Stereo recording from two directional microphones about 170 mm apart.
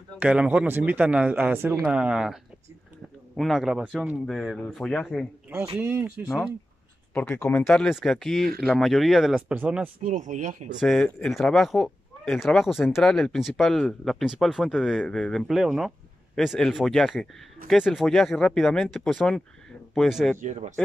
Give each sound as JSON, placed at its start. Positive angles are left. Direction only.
{"t": 0.2, "sound": "speech", "side_deg": -5}
{"t": 5.8, "sound": "speech", "side_deg": -15}
{"t": 7.2, "sound": "speech", "side_deg": 5}
{"t": 10.0, "sound": "speech", "side_deg": -45}
{"t": 10.8, "sound": "speech", "side_deg": 5}
{"t": 20.3, "sound": "speech", "side_deg": -45}